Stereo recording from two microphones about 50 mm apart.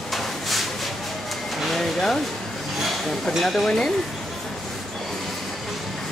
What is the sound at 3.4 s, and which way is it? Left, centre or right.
Speech, centre.